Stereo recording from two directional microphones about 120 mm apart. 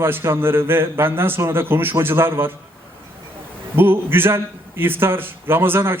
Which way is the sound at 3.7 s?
15° right (ahead or behind).